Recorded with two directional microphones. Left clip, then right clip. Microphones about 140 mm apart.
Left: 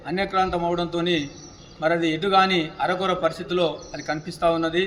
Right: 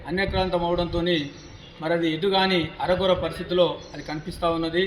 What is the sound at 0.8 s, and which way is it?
Speech, 10° left (ahead or behind).